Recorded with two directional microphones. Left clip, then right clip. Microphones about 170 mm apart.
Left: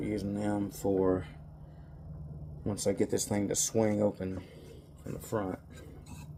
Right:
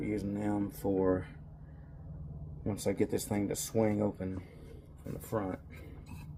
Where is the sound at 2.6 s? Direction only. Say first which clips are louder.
Left 2 dB; centre (ahead or behind).